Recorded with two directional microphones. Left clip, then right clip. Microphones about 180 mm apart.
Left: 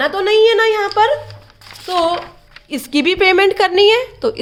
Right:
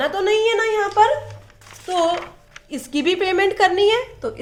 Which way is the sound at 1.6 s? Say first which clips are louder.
Left 4 dB; 60° left (ahead or behind).